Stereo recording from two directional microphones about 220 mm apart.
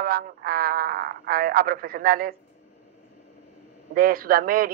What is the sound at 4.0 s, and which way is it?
Speech, 40° right (ahead or behind).